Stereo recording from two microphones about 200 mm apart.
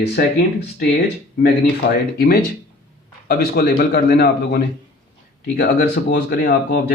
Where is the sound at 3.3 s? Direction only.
50° left (ahead or behind).